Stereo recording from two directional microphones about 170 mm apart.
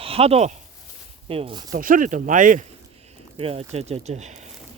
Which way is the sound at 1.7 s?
50° right (ahead or behind).